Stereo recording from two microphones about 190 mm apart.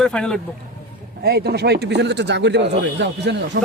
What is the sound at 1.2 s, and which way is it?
Speech, 55° right (ahead or behind).